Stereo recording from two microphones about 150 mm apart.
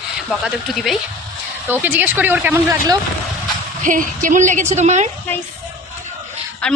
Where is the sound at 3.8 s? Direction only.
60° right (ahead or behind).